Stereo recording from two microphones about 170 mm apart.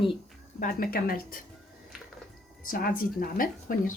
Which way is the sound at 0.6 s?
60° left (ahead or behind).